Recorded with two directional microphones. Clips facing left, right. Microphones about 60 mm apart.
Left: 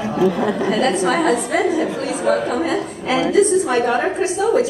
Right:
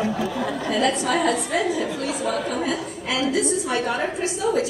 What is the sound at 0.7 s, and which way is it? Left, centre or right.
A woman's voice, left.